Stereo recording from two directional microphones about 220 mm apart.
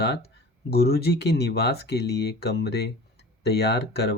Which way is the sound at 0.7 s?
45° left (ahead or behind).